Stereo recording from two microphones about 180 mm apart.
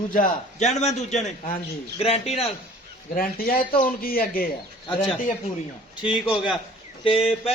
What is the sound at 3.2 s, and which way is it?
Speech, 55° left (ahead or behind).